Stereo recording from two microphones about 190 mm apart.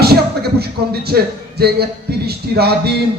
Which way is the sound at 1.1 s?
55° right (ahead or behind).